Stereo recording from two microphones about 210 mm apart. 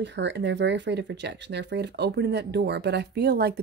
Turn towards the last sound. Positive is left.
turn(degrees=-50)  # may be behind; listen again after turning